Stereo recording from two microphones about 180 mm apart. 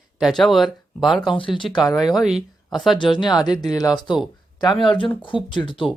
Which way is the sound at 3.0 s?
25° left (ahead or behind).